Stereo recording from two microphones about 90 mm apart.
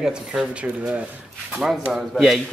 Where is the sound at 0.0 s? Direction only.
10° right (ahead or behind).